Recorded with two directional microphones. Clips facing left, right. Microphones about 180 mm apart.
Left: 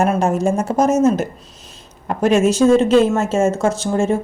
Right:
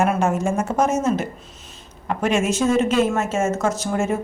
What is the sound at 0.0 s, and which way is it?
Speech, 35° left (ahead or behind).